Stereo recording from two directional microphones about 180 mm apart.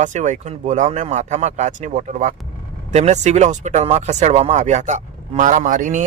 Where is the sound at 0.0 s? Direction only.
40° right (ahead or behind).